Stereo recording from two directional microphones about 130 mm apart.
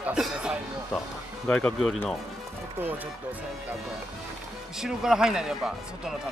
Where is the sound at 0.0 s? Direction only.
5° right (ahead or behind).